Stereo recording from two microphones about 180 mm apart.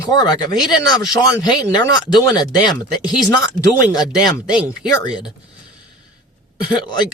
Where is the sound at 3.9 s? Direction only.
20° left (ahead or behind).